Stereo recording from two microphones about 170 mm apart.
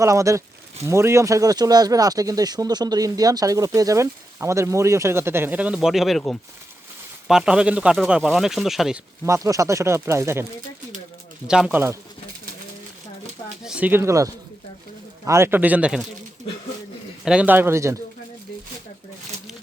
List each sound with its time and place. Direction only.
0.0 s speech: 20° right (ahead or behind); by 9.0 s centre (ahead or behind)
9.2 s speech: 20° right (ahead or behind)
11.4 s speech: 5° right (ahead or behind)
13.7 s speech: 10° right (ahead or behind)
17.2 s speech: 10° right (ahead or behind)